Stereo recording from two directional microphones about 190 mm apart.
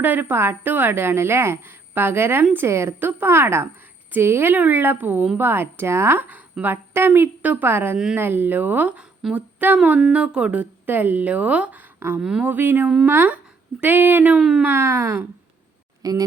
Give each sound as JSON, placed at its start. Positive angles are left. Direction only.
{"t": 0.0, "sound": "a woman's voice", "side_deg": -10}